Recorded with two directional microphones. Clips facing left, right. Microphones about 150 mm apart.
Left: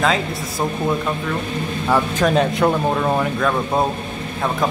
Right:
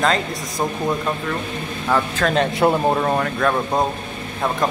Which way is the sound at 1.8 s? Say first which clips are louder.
Left 2 dB; 10° left (ahead or behind).